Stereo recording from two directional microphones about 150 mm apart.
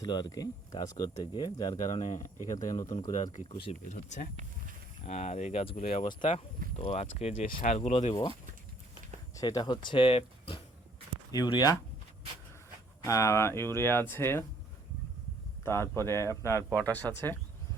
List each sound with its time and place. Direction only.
0.0 s speech: 25° left (ahead or behind)
1.9 s speech: 50° left (ahead or behind)
2.6 s speech: 25° left (ahead or behind)
3.8 s speech: 55° left (ahead or behind)
7.4 s speech: 60° left (ahead or behind)
7.9 s speech: 40° left (ahead or behind)
9.3 s speech: 25° left (ahead or behind); by 10.6 s 40° left (ahead or behind)
11.3 s speech: 25° left (ahead or behind)
13.1 s speech: 20° left (ahead or behind)
15.6 s speech: 15° left (ahead or behind)